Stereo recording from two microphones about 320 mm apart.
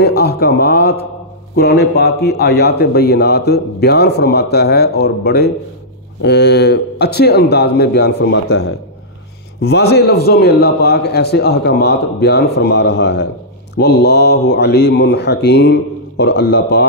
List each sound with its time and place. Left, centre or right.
0.0 s a man's voice: left